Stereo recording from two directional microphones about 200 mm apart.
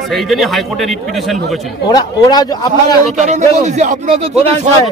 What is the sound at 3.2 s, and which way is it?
Speech, 35° right (ahead or behind).